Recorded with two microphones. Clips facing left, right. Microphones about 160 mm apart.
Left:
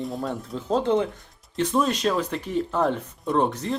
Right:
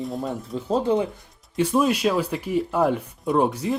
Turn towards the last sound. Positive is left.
turn(degrees=-10)  # may be behind; listen again after turning